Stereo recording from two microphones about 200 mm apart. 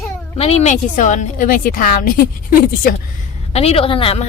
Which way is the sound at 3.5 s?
30° left (ahead or behind).